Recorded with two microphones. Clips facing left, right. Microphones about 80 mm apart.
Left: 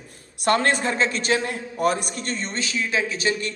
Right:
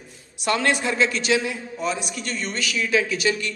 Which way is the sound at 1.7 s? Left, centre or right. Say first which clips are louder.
Left 7 dB; left.